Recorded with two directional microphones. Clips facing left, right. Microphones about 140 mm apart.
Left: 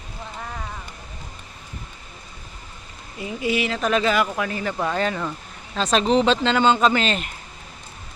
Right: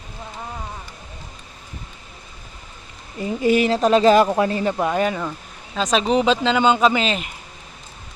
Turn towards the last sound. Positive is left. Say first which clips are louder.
# right 1 dB
turn(degrees=-5)  # may be behind; listen again after turning